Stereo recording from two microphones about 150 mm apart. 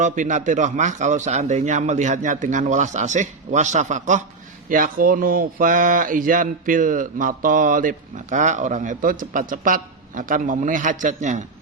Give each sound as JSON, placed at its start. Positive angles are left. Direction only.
{"t": 0.0, "sound": "a man's voice", "side_deg": -55}
{"t": 4.7, "sound": "speech", "side_deg": -65}